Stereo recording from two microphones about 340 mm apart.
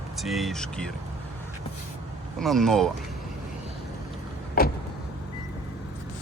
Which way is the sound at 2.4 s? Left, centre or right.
Centre.